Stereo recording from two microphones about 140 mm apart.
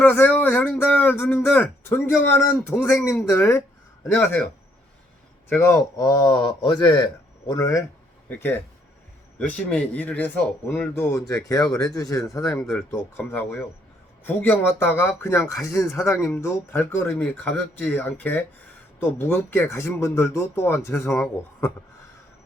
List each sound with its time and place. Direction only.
0.0 s speech: 10° left (ahead or behind)
5.5 s speech: 15° left (ahead or behind)
6.0 s speech: 30° left (ahead or behind)